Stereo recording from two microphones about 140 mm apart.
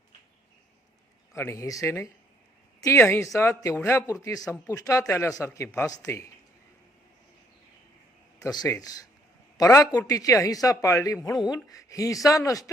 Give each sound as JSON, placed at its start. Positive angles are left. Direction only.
{"t": 1.3, "sound": "speech", "side_deg": 20}
{"t": 8.4, "sound": "speech", "side_deg": 25}